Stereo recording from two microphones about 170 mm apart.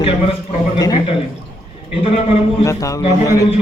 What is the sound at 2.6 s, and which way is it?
Speech, 20° left (ahead or behind).